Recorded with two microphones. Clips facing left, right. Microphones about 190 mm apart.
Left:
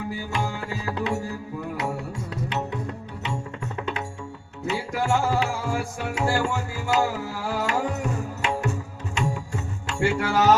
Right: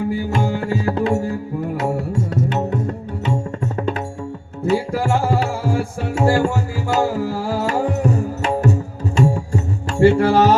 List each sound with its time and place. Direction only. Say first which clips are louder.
0.3 s tabla: right 8 dB; 45° right (ahead or behind)
2.3 s music: right 7 dB; 45° right (ahead or behind)
4.6 s tabla: right 8 dB; 40° right (ahead or behind)
7.3 s music: right 6 dB; 35° right (ahead or behind)